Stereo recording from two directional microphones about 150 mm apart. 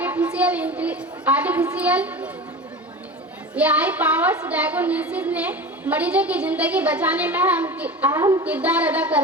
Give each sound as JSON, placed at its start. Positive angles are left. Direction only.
{"t": 0.0, "sound": "a woman's voice", "side_deg": -10}
{"t": 3.5, "sound": "speech", "side_deg": -10}
{"t": 8.4, "sound": "speech", "side_deg": -10}